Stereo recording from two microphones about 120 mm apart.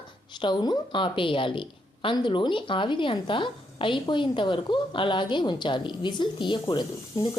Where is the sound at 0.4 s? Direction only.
35° left (ahead or behind).